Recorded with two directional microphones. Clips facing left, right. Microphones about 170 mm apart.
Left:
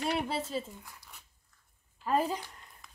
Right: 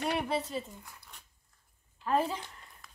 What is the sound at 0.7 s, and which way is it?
Speech, centre (ahead or behind).